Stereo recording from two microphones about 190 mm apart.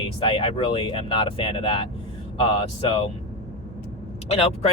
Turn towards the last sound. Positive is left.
turn(degrees=35)  # may be behind; listen again after turning